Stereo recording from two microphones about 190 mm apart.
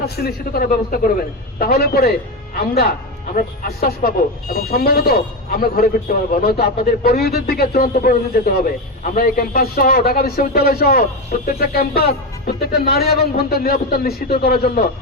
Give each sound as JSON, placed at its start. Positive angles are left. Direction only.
{"t": 0.0, "sound": "speech", "side_deg": 55}